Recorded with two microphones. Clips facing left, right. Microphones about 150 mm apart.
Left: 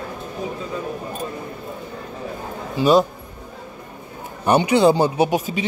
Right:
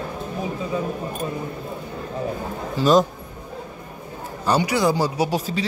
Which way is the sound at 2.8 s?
10° left (ahead or behind).